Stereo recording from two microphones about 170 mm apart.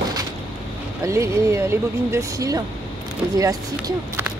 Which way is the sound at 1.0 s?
15° right (ahead or behind).